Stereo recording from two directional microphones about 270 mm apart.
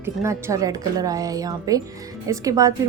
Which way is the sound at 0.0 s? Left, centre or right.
Centre.